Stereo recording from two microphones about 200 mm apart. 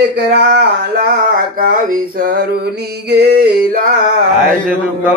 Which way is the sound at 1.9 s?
40° right (ahead or behind).